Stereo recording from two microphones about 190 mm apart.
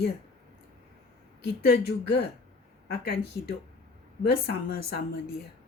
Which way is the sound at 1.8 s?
55° left (ahead or behind).